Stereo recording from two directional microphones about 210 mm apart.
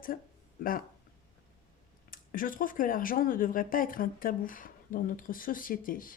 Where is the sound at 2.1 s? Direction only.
40° left (ahead or behind).